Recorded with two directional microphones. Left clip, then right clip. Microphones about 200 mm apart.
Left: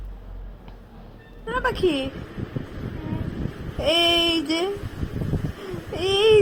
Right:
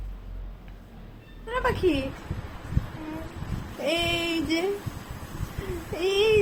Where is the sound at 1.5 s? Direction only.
15° left (ahead or behind).